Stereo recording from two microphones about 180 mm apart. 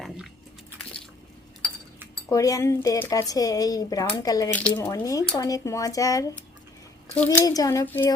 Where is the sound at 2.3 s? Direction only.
20° left (ahead or behind).